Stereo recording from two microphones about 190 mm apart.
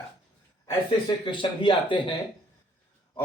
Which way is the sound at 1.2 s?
25° left (ahead or behind).